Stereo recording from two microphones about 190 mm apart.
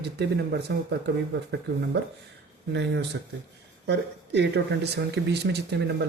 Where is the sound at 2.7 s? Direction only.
65° right (ahead or behind).